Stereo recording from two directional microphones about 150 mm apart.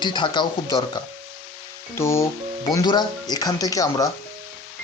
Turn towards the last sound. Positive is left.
turn(degrees=25)  # may be behind; listen again after turning